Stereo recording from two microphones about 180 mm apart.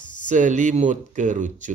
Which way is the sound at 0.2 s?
45° right (ahead or behind).